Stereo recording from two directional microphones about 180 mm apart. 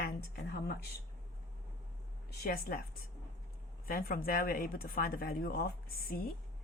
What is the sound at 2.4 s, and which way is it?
Speech, 50° left (ahead or behind).